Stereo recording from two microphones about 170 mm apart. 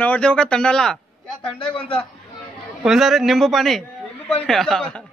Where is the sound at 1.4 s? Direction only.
30° left (ahead or behind).